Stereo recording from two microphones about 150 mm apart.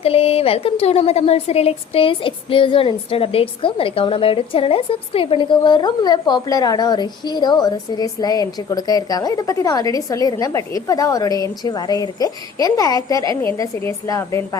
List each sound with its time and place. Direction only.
0.0 s speech: 40° left (ahead or behind); by 14.6 s 20° left (ahead or behind)